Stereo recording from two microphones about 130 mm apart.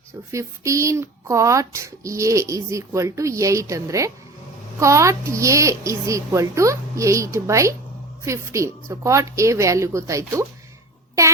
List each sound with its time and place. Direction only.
0.3 s speech: 25° right (ahead or behind)